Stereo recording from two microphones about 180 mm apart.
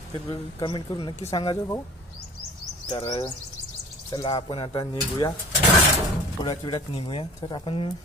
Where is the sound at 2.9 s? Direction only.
15° left (ahead or behind).